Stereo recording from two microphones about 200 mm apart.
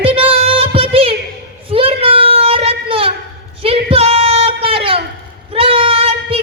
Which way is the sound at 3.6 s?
30° right (ahead or behind).